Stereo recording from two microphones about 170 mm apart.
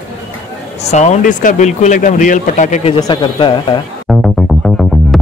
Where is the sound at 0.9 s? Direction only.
45° left (ahead or behind).